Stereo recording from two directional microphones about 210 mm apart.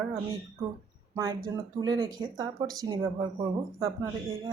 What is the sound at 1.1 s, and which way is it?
Speech, 15° right (ahead or behind).